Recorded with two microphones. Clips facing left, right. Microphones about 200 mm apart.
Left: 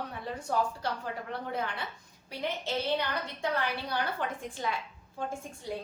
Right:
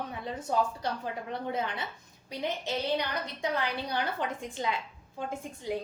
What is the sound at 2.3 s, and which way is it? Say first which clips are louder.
A woman's voice: right 1 dB; 15° right (ahead or behind).